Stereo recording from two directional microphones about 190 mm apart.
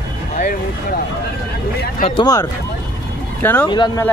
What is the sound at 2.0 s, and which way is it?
Speech, 25° left (ahead or behind).